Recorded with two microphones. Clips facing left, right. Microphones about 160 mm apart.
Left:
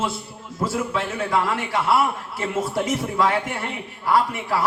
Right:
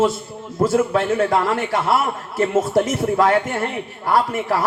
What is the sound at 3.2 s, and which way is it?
Speech, 50° right (ahead or behind).